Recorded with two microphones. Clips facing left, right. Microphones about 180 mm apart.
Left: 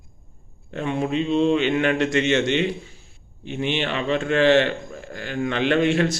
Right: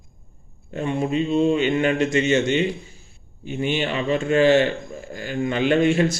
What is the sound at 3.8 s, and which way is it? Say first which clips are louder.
Speech: even; 5° right (ahead or behind).